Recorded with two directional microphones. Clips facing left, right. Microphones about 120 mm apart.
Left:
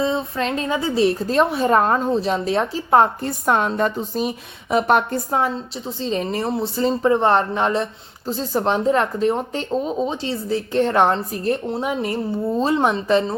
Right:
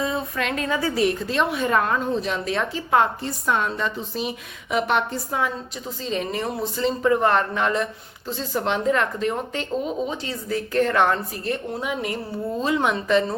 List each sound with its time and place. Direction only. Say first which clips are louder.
0.0 s speech: left 4 dB; 25° left (ahead or behind)
1.2 s speech: left 5 dB; 40° left (ahead or behind)
3.2 s a woman's voice: left 4 dB; 50° left (ahead or behind)
6.0 s speech: left 3 dB; 30° left (ahead or behind)